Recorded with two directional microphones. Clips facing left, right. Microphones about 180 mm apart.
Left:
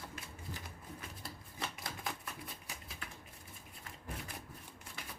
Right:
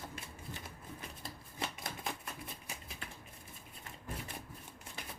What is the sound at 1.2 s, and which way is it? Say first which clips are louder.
Shuffling cards: right 3 dB; 25° right (ahead or behind).